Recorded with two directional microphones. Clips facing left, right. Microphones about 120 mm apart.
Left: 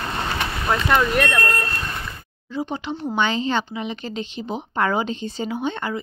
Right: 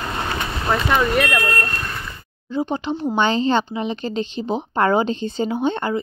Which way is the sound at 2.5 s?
30° right (ahead or behind).